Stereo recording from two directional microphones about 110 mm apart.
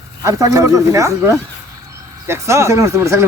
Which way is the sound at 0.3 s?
30° right (ahead or behind).